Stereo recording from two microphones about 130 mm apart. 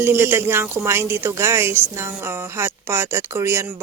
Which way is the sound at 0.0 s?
20° right (ahead or behind).